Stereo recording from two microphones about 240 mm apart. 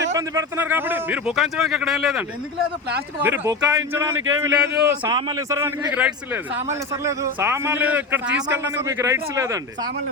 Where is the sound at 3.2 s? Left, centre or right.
Centre.